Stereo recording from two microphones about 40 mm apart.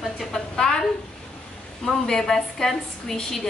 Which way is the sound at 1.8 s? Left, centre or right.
Centre.